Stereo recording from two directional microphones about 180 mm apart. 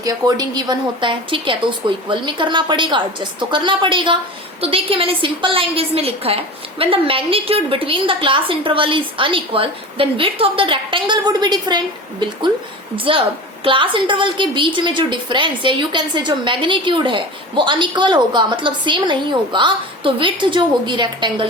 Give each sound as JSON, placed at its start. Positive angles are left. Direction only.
{"t": 0.0, "sound": "a woman's voice", "side_deg": -20}
{"t": 13.1, "sound": "a woman's voice", "side_deg": -30}